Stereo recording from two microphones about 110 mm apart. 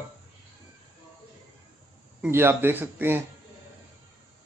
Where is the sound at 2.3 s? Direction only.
20° right (ahead or behind).